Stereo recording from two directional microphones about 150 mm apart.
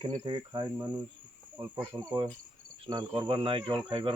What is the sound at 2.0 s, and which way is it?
Speech, 30° right (ahead or behind).